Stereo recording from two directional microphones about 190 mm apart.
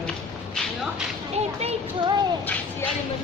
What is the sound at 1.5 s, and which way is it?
Child singing, 35° right (ahead or behind).